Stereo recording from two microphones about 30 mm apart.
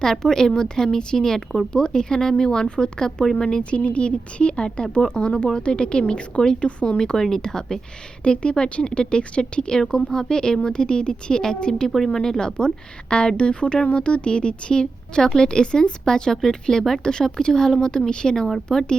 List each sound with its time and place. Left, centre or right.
0.0 s a woman's voice: centre
3.6 s a woman's voice: left
7.2 s a woman's voice: centre
8.2 s a woman's voice: left
15.2 s speech: centre
15.4 s a woman's voice: left
18.7 s speech: centre